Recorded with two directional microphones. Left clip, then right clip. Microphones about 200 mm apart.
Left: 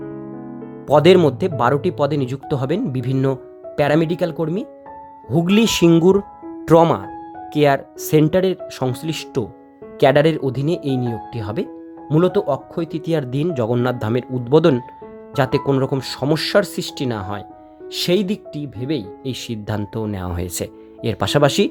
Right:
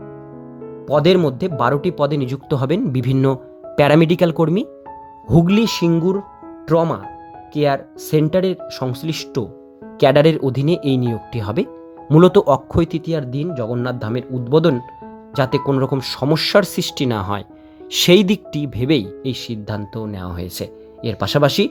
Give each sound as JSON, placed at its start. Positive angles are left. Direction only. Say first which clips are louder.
{"t": 0.9, "sound": "speech", "louder": "left 3 dB", "side_deg": 10}
{"t": 5.5, "sound": "speech", "louder": "left 3 dB", "side_deg": 10}
{"t": 13.1, "sound": "speech", "louder": "left 2 dB", "side_deg": 10}
{"t": 19.3, "sound": "speech", "louder": "left 3 dB", "side_deg": 10}